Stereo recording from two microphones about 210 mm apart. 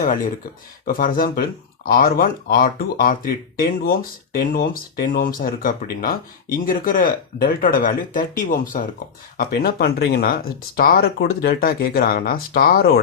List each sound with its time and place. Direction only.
0.0 s speech: 40° left (ahead or behind)